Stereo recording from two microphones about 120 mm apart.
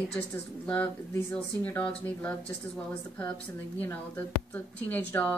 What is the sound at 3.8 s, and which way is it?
A woman's voice, 15° left (ahead or behind).